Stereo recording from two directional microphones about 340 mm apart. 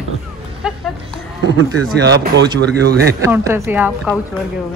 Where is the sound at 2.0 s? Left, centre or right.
Right.